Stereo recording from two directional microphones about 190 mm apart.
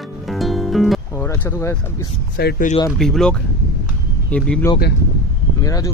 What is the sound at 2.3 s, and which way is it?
Speech, 55° left (ahead or behind).